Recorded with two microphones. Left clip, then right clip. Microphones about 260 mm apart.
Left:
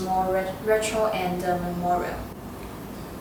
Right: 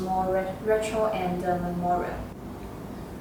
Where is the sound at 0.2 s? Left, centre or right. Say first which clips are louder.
Left 1 dB; centre.